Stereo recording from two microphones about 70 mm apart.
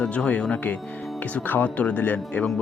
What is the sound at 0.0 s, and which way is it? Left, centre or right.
Speech, centre.